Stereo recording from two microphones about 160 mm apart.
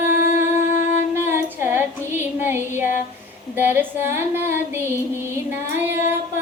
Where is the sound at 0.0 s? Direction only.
15° right (ahead or behind).